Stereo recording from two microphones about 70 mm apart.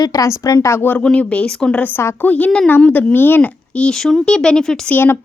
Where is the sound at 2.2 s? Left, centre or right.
Left.